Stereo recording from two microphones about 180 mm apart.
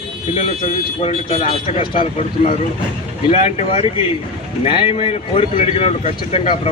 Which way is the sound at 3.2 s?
30° left (ahead or behind).